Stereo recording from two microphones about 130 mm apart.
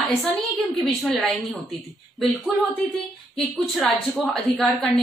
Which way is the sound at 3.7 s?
Centre (ahead or behind).